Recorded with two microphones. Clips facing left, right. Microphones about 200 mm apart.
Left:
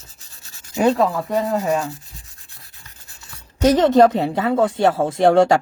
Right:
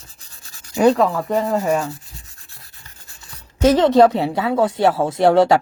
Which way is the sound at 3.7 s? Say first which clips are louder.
Even; 45° left (ahead or behind).